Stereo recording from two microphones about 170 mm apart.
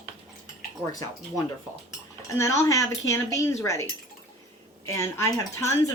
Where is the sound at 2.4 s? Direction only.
20° left (ahead or behind).